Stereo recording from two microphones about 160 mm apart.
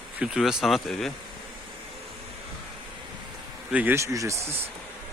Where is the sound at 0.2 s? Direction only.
5° right (ahead or behind).